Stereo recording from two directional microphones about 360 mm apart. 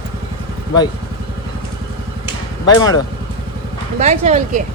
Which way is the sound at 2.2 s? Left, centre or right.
Centre.